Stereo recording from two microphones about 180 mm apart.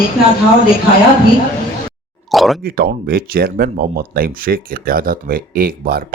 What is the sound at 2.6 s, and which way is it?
Speech, 55° right (ahead or behind).